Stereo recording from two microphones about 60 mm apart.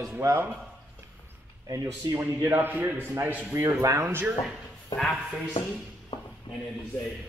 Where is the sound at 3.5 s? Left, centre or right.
Right.